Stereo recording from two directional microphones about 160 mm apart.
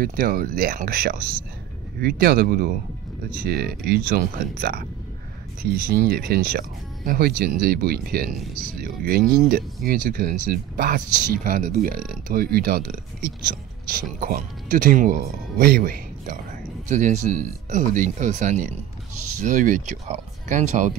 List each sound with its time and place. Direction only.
0.0 s speech: 65° right (ahead or behind)
16.8 s speech: 50° right (ahead or behind)